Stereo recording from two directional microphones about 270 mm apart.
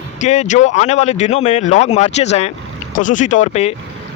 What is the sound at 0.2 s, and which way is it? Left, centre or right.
Speech, left.